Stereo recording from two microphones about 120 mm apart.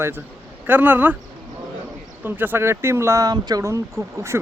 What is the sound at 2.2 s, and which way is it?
Speech, 15° right (ahead or behind).